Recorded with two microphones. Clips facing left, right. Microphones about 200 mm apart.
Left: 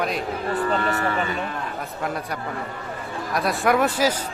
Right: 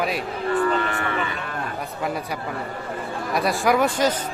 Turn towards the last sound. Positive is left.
turn(degrees=5)  # may be behind; listen again after turning